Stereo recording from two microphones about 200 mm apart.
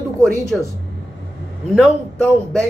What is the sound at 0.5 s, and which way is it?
Speech, centre (ahead or behind).